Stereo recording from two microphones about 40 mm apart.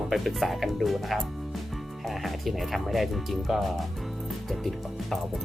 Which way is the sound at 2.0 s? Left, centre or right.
Centre.